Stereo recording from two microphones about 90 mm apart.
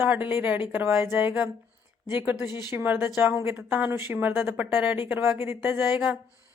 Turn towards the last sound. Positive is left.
turn(degrees=-25)  # may be behind; listen again after turning